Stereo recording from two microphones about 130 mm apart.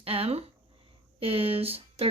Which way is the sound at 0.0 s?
50° right (ahead or behind).